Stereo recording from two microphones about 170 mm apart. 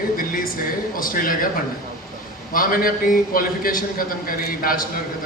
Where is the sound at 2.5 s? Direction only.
55° left (ahead or behind).